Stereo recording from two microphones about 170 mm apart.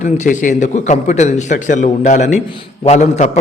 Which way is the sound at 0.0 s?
45° left (ahead or behind).